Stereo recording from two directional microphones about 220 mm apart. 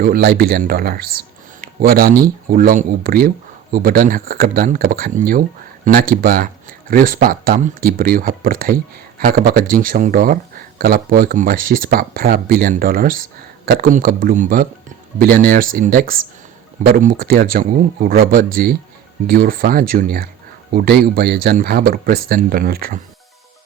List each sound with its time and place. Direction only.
0.0 s speech: 45° right (ahead or behind)